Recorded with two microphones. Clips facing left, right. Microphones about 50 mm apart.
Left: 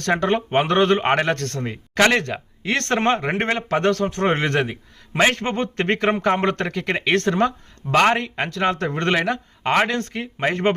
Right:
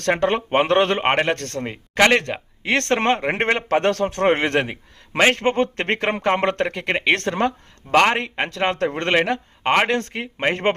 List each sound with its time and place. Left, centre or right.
0.0 s a man's voice: right